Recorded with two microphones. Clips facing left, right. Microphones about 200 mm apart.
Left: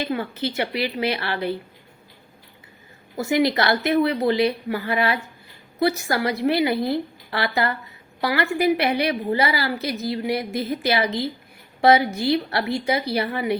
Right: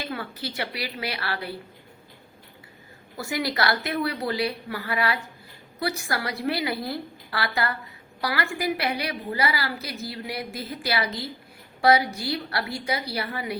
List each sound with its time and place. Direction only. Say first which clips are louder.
0.0 s a woman's voice: left 7 dB; 25° left (ahead or behind)
3.2 s a woman's voice: left 7 dB; 20° left (ahead or behind)